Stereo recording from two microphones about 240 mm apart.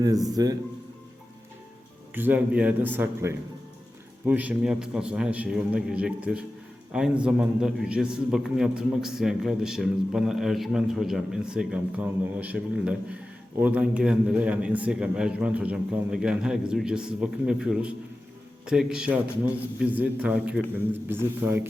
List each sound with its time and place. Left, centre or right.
0.3 s a man's voice: centre
2.1 s a man's voice: centre